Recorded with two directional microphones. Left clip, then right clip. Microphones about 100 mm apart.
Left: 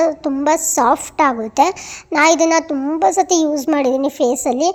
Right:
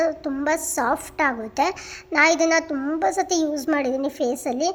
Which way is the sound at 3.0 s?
60° left (ahead or behind).